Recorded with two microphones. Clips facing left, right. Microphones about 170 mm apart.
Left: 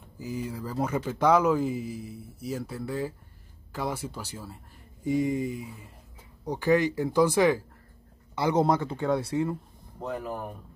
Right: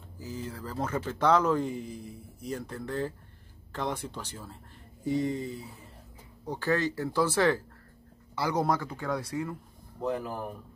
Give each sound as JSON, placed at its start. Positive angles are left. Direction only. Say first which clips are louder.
{"t": 0.2, "sound": "speech", "louder": "left 4 dB", "side_deg": 15}
{"t": 10.0, "sound": "speech", "louder": "right 2 dB", "side_deg": 0}